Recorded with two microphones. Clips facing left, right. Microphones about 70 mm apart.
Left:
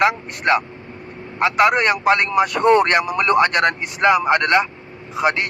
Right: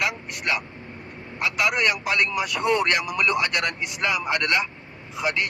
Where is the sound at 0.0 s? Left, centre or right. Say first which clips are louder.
Left 9 dB; left.